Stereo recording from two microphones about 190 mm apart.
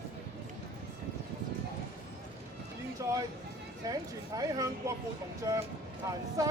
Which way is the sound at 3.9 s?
20° right (ahead or behind).